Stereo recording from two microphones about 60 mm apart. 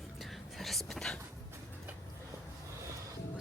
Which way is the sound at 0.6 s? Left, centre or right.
Centre.